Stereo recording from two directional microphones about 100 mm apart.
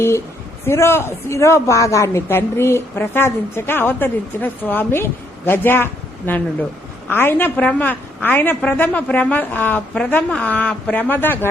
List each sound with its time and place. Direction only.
0.7 s a woman's voice: 25° left (ahead or behind)